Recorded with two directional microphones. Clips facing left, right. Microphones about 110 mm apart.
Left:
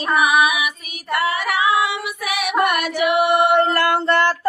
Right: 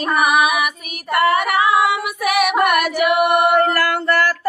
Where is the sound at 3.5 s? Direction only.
25° left (ahead or behind).